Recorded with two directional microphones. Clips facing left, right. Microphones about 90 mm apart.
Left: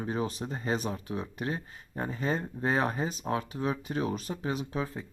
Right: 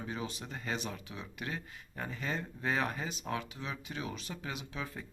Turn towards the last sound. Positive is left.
turn(degrees=35)  # may be behind; listen again after turning